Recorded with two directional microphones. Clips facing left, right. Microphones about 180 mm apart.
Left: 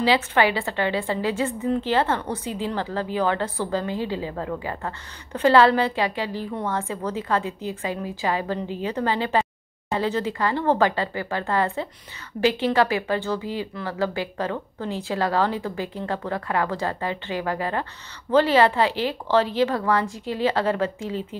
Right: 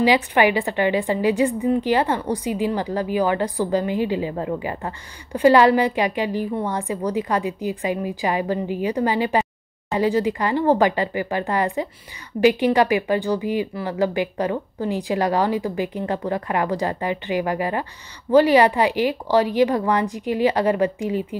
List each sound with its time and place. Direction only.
0.0 s a woman's voice: 15° right (ahead or behind)